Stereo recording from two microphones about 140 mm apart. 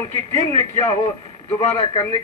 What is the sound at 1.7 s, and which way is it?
Speech, 45° left (ahead or behind).